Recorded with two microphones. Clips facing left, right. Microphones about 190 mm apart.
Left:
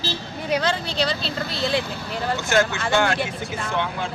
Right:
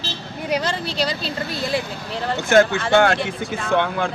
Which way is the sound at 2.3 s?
55° right (ahead or behind).